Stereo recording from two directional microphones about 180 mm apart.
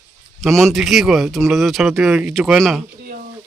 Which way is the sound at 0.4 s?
Centre (ahead or behind).